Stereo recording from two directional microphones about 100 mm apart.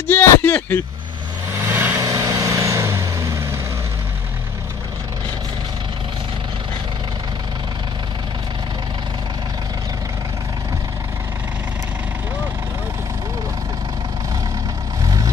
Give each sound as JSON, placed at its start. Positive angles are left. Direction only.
{"t": 0.1, "sound": "a sound", "side_deg": 20}
{"t": 1.6, "sound": "vehicle", "side_deg": -20}
{"t": 2.0, "sound": "vehicle", "side_deg": -35}
{"t": 15.0, "sound": "vehicle", "side_deg": -35}